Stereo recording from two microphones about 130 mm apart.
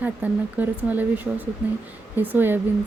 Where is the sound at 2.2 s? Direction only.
15° right (ahead or behind).